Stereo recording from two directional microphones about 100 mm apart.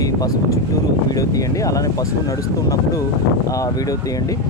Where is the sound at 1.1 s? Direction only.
35° left (ahead or behind).